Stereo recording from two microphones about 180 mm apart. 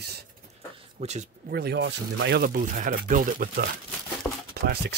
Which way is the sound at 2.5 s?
50° right (ahead or behind).